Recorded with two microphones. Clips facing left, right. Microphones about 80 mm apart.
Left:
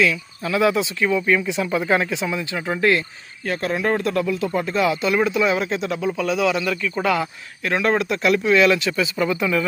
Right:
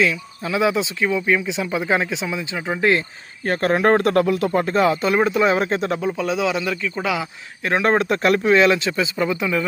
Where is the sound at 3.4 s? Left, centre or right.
Right.